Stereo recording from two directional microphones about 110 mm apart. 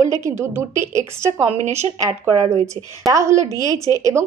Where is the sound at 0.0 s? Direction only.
25° right (ahead or behind).